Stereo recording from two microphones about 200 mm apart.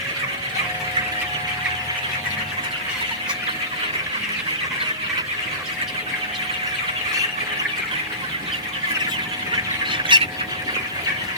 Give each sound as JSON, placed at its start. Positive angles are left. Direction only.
{"t": 10.1, "sound": "bird", "side_deg": -25}